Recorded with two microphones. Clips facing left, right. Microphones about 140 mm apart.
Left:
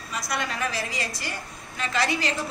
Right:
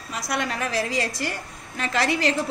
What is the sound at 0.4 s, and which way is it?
Speech, 70° right (ahead or behind).